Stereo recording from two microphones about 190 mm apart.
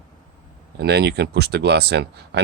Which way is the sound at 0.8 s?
60° right (ahead or behind).